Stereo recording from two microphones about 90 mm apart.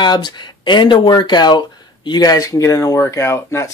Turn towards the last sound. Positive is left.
turn(degrees=30)  # may be behind; listen again after turning